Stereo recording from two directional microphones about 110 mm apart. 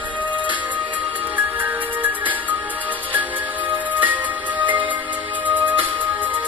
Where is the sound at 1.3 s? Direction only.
15° right (ahead or behind).